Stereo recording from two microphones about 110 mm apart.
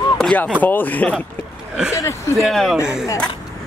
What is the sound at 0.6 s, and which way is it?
Speech, 15° left (ahead or behind).